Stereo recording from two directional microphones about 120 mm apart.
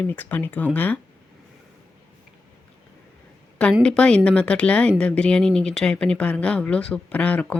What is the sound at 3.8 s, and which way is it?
Speech, 5° left (ahead or behind).